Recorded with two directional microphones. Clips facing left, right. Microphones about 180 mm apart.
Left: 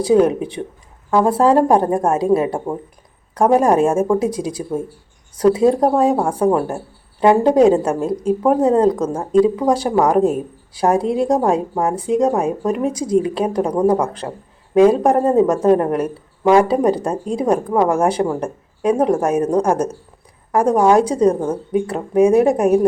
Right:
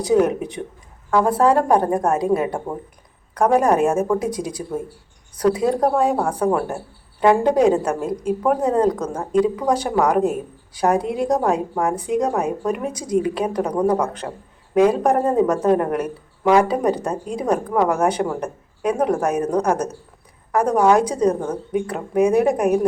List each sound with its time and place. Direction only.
0.0 s speech: 30° left (ahead or behind)
15.4 s speech: 30° left (ahead or behind)